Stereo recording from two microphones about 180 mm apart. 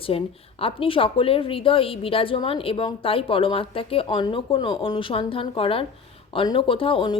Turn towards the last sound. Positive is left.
turn(degrees=30)  # may be behind; listen again after turning